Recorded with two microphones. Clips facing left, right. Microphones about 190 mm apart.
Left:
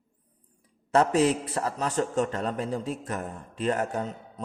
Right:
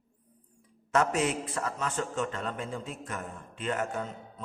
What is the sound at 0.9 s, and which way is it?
A man's voice, 35° left (ahead or behind).